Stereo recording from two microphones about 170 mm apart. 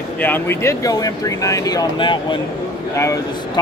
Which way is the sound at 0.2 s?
10° left (ahead or behind).